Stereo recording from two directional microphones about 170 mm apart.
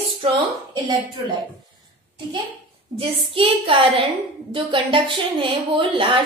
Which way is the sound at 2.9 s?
35° right (ahead or behind).